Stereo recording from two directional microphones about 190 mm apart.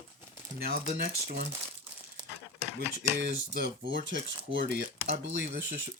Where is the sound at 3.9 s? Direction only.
75° right (ahead or behind).